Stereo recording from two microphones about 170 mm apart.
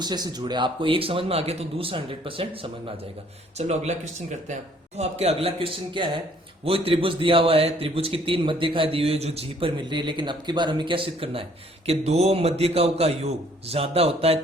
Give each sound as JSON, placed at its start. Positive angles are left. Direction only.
{"t": 0.0, "sound": "a man's voice", "side_deg": -25}